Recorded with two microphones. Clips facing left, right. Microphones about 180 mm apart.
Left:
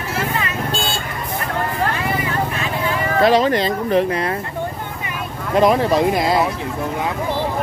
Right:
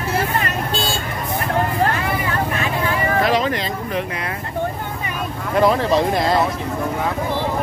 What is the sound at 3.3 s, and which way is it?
Speech, 35° left (ahead or behind).